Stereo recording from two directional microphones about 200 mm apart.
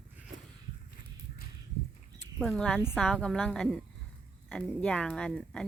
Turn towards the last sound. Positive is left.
turn(degrees=5)  # may be behind; listen again after turning